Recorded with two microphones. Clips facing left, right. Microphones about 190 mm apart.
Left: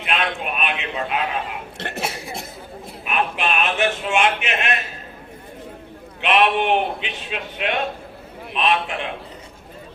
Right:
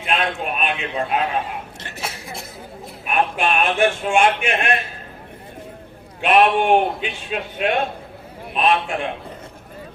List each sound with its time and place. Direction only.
0.1 s a sound: 40° right (ahead or behind)
1.8 s speech: 65° left (ahead or behind)
3.1 s a man's voice: 45° right (ahead or behind)
6.2 s a man's voice: 45° right (ahead or behind)